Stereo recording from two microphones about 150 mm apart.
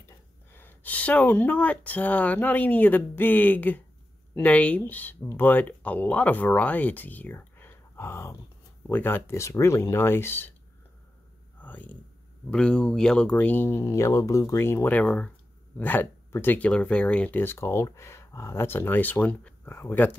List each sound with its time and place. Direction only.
0.5 s speech: 15° left (ahead or behind)
11.6 s speech: 10° left (ahead or behind)